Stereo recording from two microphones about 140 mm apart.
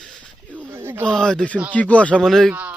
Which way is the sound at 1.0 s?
5° left (ahead or behind).